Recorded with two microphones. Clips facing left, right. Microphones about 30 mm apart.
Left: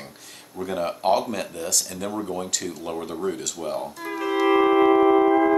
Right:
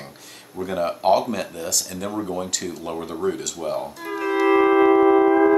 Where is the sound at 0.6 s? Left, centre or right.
Centre.